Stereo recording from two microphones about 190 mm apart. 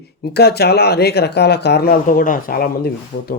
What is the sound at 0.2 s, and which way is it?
Speech, 60° left (ahead or behind).